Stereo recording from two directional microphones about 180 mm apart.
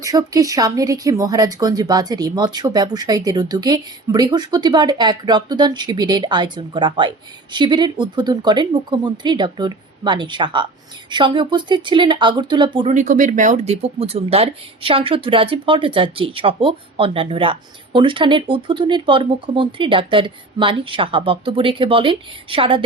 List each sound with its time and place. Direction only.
0.0 s speech: 20° right (ahead or behind)
12.9 s speech: 45° right (ahead or behind); by 22.8 s 30° right (ahead or behind)